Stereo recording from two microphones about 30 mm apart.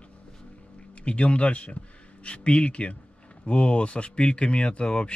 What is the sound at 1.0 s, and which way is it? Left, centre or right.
Speech, left.